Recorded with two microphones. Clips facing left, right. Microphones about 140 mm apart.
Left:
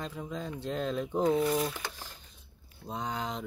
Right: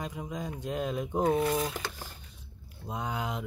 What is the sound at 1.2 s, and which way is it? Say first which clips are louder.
Speech: even; 55° right (ahead or behind).